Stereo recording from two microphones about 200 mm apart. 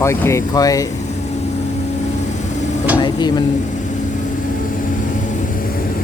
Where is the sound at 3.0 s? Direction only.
20° left (ahead or behind).